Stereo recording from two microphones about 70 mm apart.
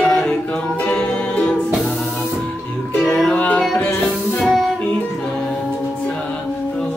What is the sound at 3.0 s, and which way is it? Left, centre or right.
Music, centre.